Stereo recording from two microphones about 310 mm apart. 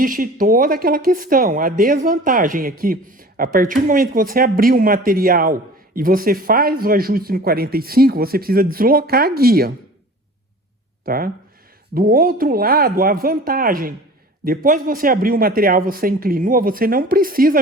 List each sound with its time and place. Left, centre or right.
0.0 s speech: right
11.0 s speech: right